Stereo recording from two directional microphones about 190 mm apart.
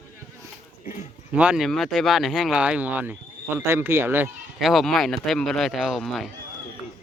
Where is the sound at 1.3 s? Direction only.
5° right (ahead or behind).